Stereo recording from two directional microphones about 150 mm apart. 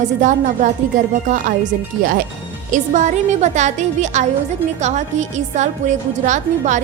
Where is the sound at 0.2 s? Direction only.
55° right (ahead or behind).